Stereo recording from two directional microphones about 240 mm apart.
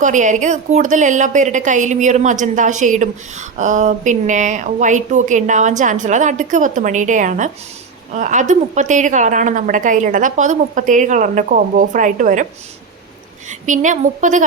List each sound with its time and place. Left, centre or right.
0.0 s a woman's voice: right
13.5 s a woman's voice: right